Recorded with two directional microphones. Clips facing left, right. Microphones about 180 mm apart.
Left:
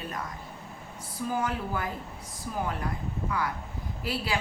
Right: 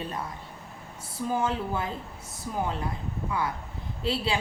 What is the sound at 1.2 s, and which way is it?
Speech, 25° right (ahead or behind).